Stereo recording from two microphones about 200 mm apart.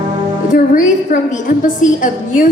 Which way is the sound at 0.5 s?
40° left (ahead or behind).